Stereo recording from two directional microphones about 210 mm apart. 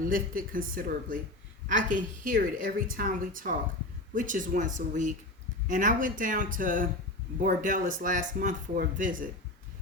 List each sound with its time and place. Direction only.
0.0 s a woman's voice: 40° right (ahead or behind)